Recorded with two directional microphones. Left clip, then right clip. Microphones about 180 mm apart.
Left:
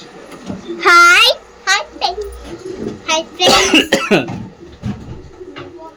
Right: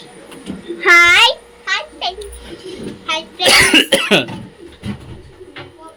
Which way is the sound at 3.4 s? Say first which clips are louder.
Right 1 dB; 5° right (ahead or behind).